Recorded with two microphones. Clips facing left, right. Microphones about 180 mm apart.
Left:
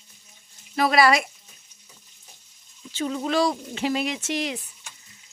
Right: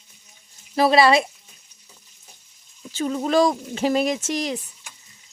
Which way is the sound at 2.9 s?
45° right (ahead or behind).